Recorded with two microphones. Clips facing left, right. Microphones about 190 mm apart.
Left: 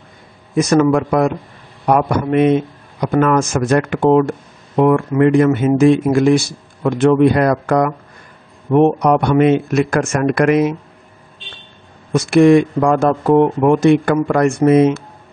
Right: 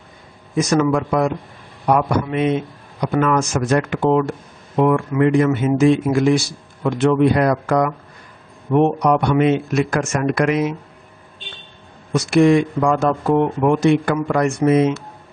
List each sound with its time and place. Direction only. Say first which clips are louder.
0.6 s speech: left 4 dB; 55° left (ahead or behind)
12.1 s speech: left 4 dB; 55° left (ahead or behind)